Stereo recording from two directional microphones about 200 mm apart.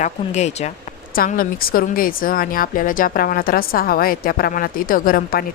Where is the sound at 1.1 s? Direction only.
45° left (ahead or behind).